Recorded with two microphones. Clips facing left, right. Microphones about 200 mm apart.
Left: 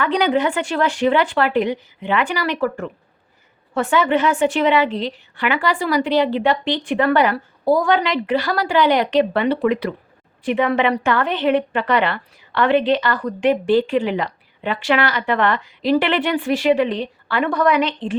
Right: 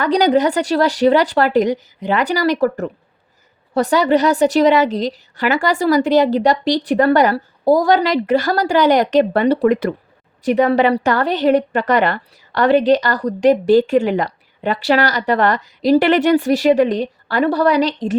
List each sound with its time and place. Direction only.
0.0 s a woman's voice: 40° right (ahead or behind)